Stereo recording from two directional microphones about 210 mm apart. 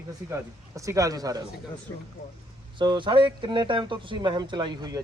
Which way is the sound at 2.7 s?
20° right (ahead or behind).